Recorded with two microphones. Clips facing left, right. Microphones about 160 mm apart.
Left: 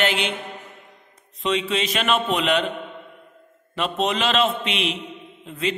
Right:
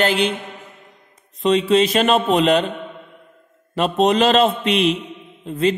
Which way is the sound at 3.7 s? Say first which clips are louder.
Right 7 dB; 40° right (ahead or behind).